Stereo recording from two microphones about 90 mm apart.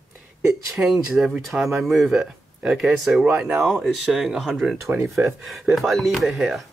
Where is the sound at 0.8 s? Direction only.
5° right (ahead or behind).